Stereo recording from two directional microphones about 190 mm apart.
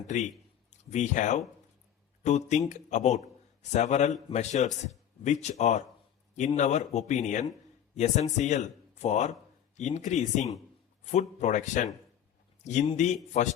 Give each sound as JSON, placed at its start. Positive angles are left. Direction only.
{"t": 0.1, "sound": "a man's voice", "side_deg": 40}